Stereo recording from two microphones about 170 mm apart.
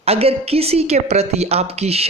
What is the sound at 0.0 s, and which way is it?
A woman's voice, 35° right (ahead or behind).